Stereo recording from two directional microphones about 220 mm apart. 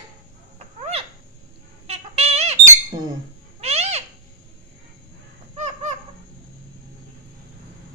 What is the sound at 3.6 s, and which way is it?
Owl, 30° right (ahead or behind).